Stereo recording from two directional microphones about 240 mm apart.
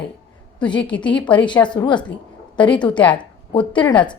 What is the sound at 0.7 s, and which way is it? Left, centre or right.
A woman's voice, centre.